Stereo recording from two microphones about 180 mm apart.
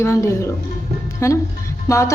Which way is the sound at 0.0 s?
15° left (ahead or behind).